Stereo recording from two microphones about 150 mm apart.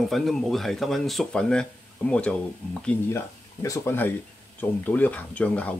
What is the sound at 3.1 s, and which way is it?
Speech, 20° left (ahead or behind).